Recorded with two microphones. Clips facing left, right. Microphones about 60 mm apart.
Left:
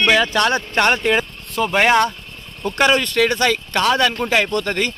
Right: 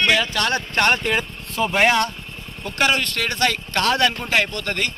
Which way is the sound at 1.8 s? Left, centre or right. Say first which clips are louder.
Left 4 dB; centre.